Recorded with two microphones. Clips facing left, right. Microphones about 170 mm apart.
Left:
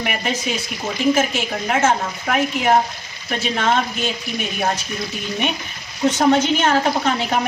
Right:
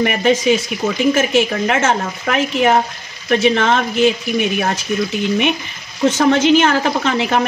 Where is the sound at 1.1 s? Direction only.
90° right.